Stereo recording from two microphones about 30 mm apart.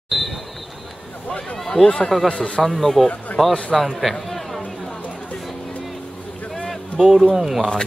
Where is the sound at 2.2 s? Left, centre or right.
Left.